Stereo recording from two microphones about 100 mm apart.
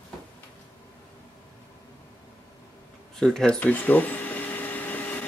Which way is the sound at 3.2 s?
5° left (ahead or behind).